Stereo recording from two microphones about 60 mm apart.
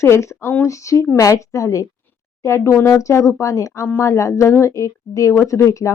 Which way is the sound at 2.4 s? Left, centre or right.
Left.